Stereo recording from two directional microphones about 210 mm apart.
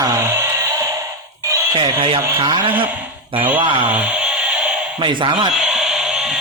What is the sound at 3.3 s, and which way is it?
Speech, 25° right (ahead or behind).